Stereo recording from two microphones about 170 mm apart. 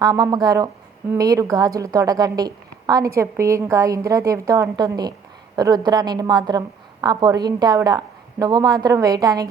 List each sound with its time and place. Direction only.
0.0 s a woman's voice: 20° right (ahead or behind)